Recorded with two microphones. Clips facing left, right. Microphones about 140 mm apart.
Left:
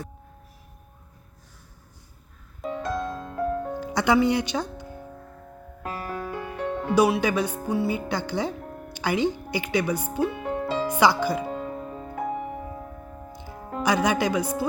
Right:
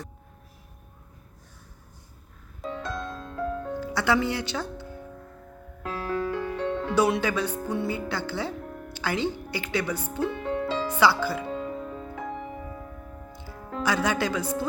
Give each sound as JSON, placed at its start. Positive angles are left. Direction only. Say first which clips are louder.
{"t": 2.6, "sound": "music", "louder": "left 4 dB", "side_deg": 10}
{"t": 3.8, "sound": "speech", "louder": "left 3 dB", "side_deg": 20}
{"t": 5.8, "sound": "music", "louder": "right 3 dB", "side_deg": 10}
{"t": 13.7, "sound": "speech", "louder": "left 3 dB", "side_deg": 15}